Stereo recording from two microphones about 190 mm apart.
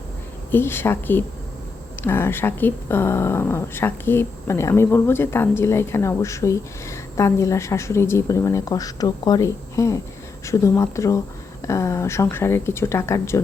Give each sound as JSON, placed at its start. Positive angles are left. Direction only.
{"t": 0.5, "sound": "speech", "side_deg": 10}